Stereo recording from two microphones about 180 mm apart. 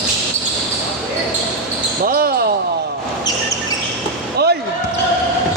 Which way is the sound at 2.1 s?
55° right (ahead or behind).